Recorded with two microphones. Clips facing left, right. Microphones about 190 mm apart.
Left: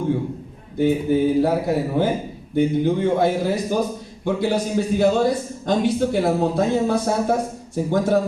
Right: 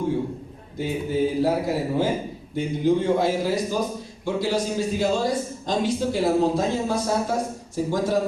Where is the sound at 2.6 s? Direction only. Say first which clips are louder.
Left 3 dB; 60° left (ahead or behind).